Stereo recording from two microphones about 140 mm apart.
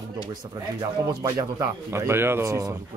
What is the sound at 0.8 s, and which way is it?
Speech, 25° right (ahead or behind).